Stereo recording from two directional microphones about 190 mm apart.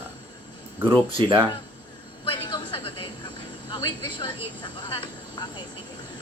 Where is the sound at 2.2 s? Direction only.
25° left (ahead or behind).